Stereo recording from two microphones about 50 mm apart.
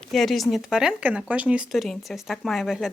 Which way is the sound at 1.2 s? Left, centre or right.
Right.